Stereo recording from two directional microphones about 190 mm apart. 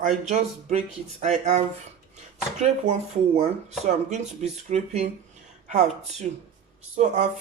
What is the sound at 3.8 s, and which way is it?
Speech, 35° right (ahead or behind).